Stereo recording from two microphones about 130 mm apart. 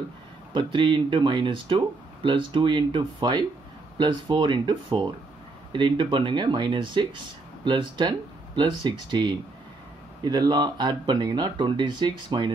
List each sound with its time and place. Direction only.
0.5 s speech: 40° right (ahead or behind)